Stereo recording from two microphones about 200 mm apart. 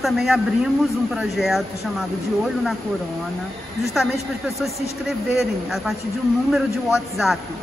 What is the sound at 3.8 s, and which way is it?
Speech, centre (ahead or behind).